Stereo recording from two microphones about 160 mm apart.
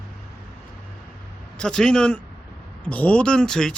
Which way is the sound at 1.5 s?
5° left (ahead or behind).